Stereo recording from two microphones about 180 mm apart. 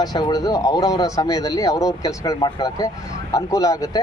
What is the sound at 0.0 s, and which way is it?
A man's voice, 20° left (ahead or behind).